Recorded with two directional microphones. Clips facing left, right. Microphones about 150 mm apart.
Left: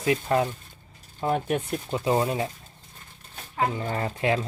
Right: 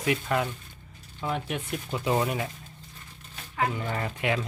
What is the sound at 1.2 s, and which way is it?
Speech, 45° left (ahead or behind).